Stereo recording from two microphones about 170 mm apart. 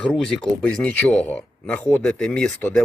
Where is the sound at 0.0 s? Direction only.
5° left (ahead or behind).